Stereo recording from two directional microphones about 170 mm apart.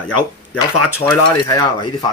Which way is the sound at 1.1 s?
20° left (ahead or behind).